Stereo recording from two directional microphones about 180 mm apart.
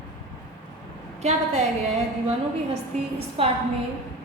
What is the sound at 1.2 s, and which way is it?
Speech, 40° right (ahead or behind).